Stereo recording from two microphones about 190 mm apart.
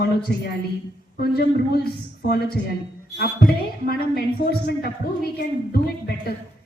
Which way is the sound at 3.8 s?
55° left (ahead or behind).